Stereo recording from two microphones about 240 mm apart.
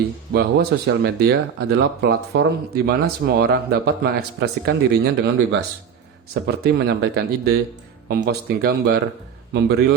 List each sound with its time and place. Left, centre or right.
0.3 s speech: right